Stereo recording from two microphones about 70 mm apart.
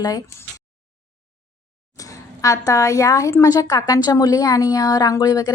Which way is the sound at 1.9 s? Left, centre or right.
Left.